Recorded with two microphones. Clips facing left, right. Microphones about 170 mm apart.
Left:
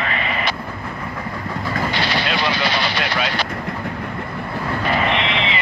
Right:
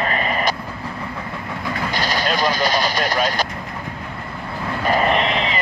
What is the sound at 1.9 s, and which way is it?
Speech, 45° right (ahead or behind).